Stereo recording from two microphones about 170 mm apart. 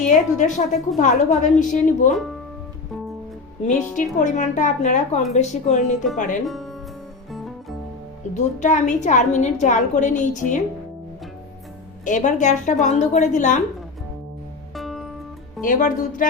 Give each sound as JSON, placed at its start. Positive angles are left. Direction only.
{"t": 0.0, "sound": "a woman's voice", "side_deg": 45}
{"t": 3.9, "sound": "a woman's voice", "side_deg": 50}
{"t": 6.4, "sound": "speech", "side_deg": 0}
{"t": 7.3, "sound": "music", "side_deg": 0}
{"t": 8.5, "sound": "a woman's voice", "side_deg": 45}
{"t": 12.0, "sound": "a woman's voice", "side_deg": 45}
{"t": 14.8, "sound": "music", "side_deg": 0}
{"t": 15.6, "sound": "a woman's voice", "side_deg": 50}